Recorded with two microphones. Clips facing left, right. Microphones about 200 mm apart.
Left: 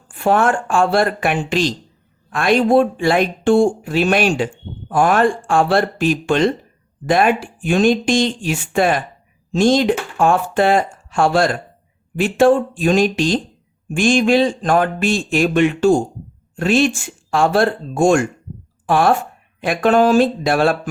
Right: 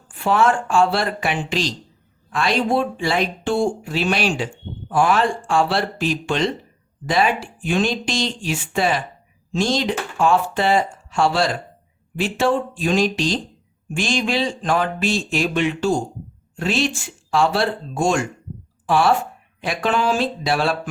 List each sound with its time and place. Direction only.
0.2 s speech: 50° left (ahead or behind)